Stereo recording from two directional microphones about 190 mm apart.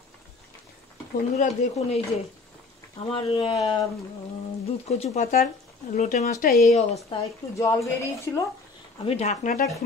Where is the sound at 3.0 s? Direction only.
30° left (ahead or behind); by 6.6 s 50° left (ahead or behind).